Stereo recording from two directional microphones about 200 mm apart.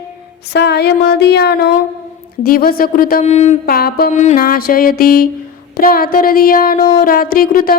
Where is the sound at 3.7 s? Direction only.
50° left (ahead or behind).